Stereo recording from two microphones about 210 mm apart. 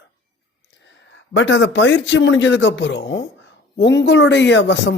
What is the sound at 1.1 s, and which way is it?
A man's voice, 60° left (ahead or behind).